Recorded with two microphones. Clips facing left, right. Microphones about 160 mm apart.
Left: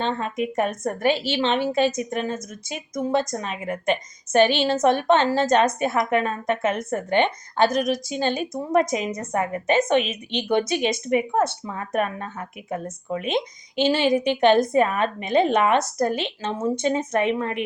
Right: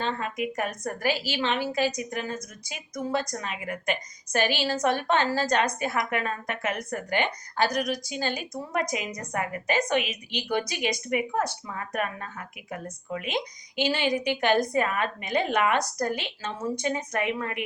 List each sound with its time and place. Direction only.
0.0 s a woman's voice: 25° left (ahead or behind)